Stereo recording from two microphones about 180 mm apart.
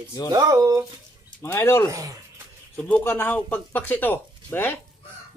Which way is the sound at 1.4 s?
15° left (ahead or behind).